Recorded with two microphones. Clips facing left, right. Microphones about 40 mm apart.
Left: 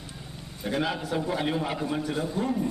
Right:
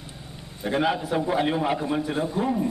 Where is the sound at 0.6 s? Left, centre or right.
Centre.